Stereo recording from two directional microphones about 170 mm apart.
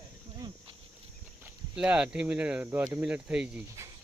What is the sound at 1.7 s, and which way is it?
Speech, 5° right (ahead or behind).